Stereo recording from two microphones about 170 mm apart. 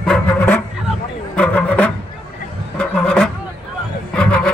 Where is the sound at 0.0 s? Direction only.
5° left (ahead or behind).